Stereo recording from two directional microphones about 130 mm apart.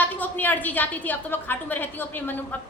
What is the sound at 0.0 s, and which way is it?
A woman's voice, 15° left (ahead or behind).